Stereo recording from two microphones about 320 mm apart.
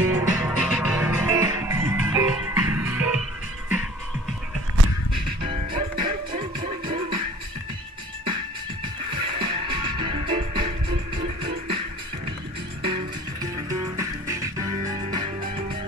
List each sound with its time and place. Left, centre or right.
0.0 s music: centre
5.4 s music: centre
9.1 s music: centre
12.8 s music: centre